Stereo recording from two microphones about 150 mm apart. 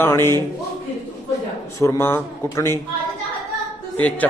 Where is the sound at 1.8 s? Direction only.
20° left (ahead or behind).